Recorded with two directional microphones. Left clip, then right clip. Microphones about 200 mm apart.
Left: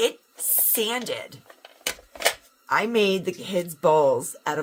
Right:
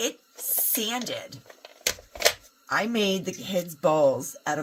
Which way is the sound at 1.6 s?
35° right (ahead or behind).